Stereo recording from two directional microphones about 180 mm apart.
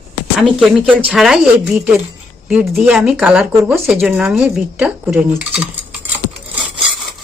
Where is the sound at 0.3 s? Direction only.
Centre (ahead or behind).